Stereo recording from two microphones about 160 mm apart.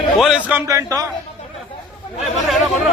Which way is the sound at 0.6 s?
20° right (ahead or behind).